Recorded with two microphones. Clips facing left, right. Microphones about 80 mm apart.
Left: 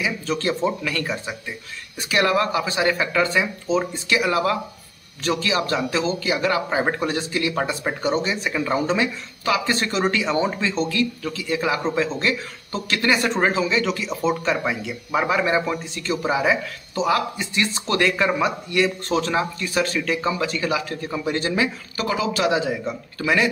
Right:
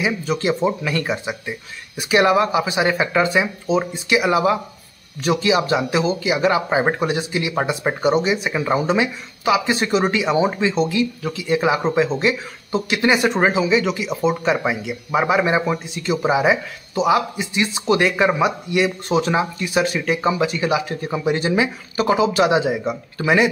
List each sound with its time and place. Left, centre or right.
0.3 s a man's voice: centre
0.8 s a man's voice: right